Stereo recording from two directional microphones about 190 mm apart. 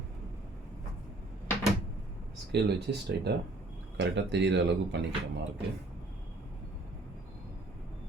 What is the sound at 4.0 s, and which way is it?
Speech, 65° right (ahead or behind).